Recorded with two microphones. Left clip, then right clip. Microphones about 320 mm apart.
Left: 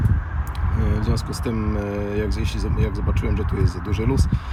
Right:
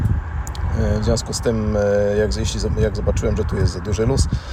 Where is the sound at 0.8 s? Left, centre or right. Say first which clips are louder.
Right 7 dB; centre.